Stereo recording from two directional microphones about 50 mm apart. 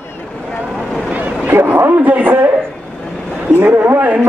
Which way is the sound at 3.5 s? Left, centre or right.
Right.